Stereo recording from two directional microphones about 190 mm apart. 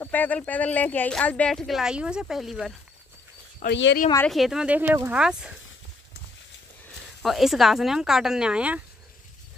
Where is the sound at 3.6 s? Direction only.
65° left (ahead or behind).